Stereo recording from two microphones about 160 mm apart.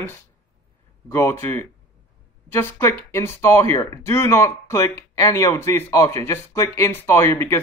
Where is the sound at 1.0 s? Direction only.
15° left (ahead or behind).